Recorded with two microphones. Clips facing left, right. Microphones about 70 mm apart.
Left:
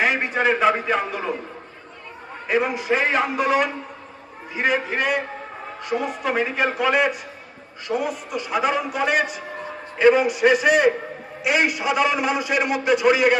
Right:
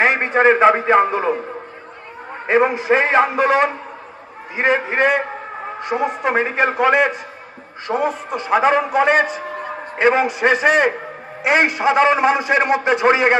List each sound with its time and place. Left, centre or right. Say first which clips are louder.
0.0 s a man's voice: right 6 dB; right
2.4 s a man's voice: right 6 dB; right